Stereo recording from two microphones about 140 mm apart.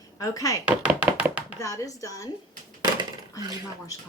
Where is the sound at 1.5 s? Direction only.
25° left (ahead or behind).